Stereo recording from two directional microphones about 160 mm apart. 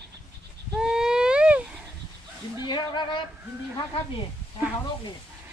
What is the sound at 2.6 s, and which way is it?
Speech, 25° left (ahead or behind).